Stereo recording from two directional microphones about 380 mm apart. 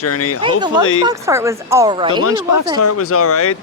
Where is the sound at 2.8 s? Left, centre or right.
Left.